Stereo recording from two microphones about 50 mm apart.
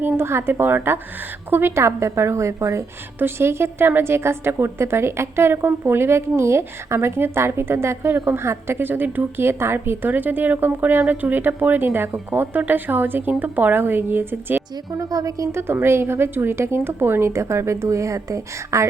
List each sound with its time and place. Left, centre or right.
0.2 s a woman's voice: right
3.2 s a woman's voice: right
14.9 s a woman's voice: right
15.6 s a woman's voice: right